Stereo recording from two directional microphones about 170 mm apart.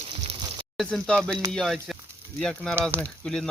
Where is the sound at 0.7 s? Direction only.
Centre (ahead or behind).